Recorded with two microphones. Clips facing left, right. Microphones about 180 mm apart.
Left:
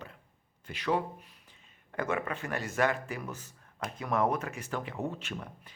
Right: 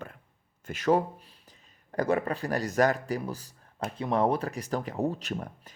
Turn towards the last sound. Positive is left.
turn(degrees=-40)  # may be behind; listen again after turning